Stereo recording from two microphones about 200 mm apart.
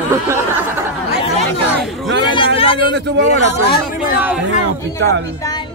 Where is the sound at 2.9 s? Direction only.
60° right (ahead or behind).